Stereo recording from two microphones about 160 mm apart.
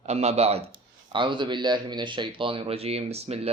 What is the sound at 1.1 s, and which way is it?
Speech, 30° right (ahead or behind).